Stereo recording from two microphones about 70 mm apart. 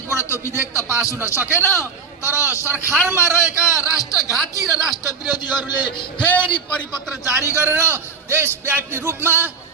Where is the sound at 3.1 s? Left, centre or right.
Right.